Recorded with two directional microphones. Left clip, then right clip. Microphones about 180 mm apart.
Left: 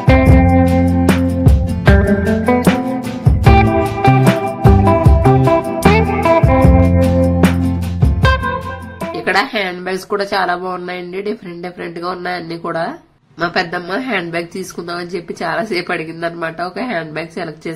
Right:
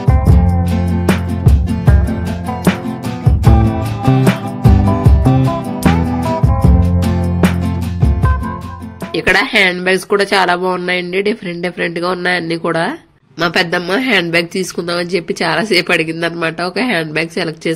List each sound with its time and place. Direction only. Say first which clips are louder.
0.2 s music: left 8 dB; centre (ahead or behind)
9.1 s a woman's voice: right 4 dB; 25° right (ahead or behind)